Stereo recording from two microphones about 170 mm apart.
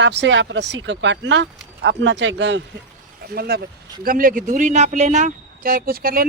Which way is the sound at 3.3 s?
65° right (ahead or behind).